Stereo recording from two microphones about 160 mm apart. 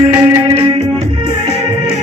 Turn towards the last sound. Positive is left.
turn(degrees=-30)  # may be behind; listen again after turning